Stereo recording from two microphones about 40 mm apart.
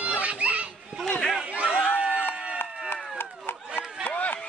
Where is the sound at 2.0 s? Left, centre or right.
Right.